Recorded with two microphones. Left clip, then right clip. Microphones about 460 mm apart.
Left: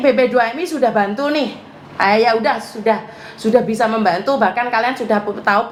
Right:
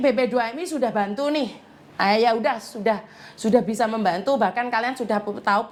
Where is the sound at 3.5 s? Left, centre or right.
Right.